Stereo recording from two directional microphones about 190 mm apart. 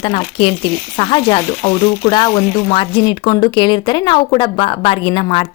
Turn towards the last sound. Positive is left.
turn(degrees=30)  # may be behind; listen again after turning